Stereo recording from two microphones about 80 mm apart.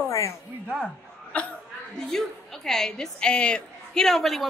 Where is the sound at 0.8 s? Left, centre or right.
Centre.